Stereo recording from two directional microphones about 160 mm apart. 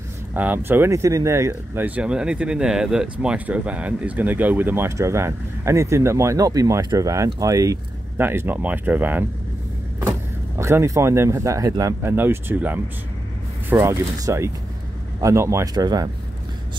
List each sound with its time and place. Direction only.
0.3 s speech: 10° right (ahead or behind)
10.6 s speech: 15° right (ahead or behind)